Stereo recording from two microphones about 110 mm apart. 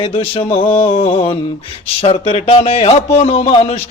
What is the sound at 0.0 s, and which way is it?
A man's voice, 60° left (ahead or behind).